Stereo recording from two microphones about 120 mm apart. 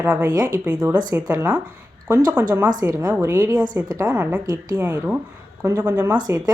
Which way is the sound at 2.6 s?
30° right (ahead or behind).